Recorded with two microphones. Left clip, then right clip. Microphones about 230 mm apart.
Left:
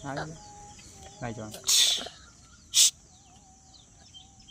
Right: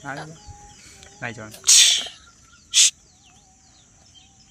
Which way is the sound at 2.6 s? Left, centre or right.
Centre.